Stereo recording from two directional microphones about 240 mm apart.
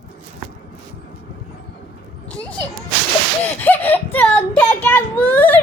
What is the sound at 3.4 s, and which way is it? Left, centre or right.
A child's voice, centre.